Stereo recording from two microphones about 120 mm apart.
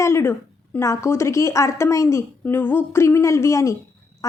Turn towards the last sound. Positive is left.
turn(degrees=25)  # may be behind; listen again after turning